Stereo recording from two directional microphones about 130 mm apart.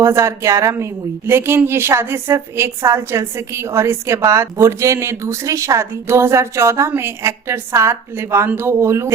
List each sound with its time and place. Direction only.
0.0 s a woman's voice: 20° right (ahead or behind)